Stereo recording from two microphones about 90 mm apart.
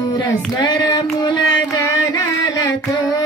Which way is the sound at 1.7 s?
45° left (ahead or behind).